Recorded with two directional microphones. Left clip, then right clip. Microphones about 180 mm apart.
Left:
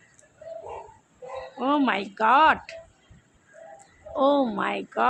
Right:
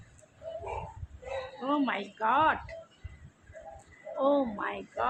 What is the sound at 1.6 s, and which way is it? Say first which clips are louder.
Speech: left 8 dB; 60° left (ahead or behind).